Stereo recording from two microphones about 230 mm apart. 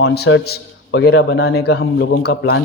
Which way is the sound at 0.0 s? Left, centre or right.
Left.